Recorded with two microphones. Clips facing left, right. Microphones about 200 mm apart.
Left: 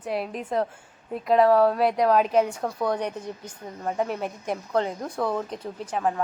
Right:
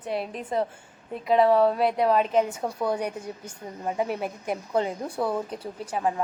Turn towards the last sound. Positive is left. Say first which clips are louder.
# left 1 dB
turn(degrees=-5)  # may be behind; listen again after turning